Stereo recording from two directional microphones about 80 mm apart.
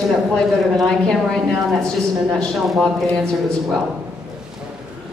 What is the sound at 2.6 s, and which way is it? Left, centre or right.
Speech, centre.